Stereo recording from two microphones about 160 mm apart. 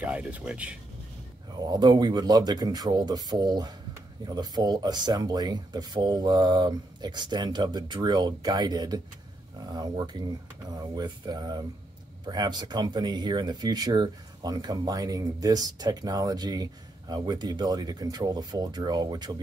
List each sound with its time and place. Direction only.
0.0 s speech: 10° right (ahead or behind)
1.6 s speech: 25° right (ahead or behind)